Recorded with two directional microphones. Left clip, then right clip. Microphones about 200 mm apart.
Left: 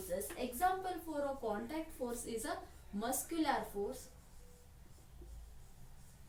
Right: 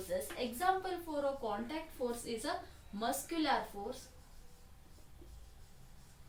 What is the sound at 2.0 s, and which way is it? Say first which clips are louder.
Speech: right 5 dB; 20° right (ahead or behind).